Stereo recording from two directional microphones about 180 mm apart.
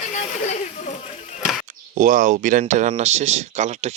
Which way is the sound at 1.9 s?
45° right (ahead or behind).